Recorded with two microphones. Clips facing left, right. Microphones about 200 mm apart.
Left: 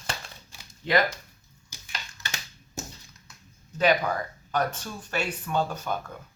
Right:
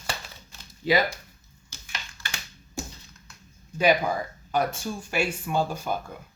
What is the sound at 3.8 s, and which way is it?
Speech, 10° right (ahead or behind).